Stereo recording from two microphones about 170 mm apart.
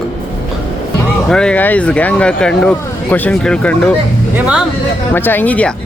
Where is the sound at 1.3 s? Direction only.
5° left (ahead or behind).